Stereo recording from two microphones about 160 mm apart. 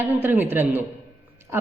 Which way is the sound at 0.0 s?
10° right (ahead or behind).